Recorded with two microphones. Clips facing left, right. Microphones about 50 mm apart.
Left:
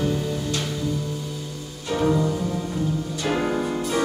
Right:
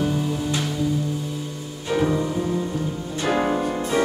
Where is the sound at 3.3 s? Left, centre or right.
Right.